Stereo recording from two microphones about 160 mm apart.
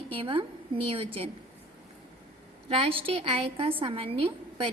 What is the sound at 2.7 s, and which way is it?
A woman's voice, 35° right (ahead or behind).